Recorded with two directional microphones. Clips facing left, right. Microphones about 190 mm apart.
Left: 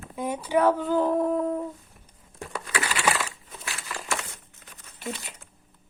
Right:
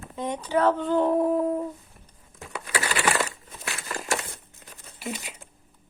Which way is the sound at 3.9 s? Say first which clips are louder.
Right 3 dB; 40° right (ahead or behind).